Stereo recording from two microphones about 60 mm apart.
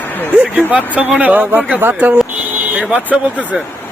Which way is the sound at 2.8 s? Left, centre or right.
Centre.